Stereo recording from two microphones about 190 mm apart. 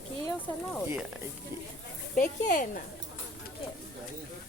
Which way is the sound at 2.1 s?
45° left (ahead or behind).